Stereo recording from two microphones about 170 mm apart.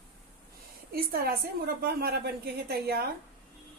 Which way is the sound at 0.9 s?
60° right (ahead or behind).